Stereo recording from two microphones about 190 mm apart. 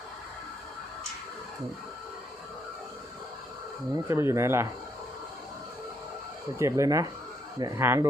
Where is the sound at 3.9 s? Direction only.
15° right (ahead or behind).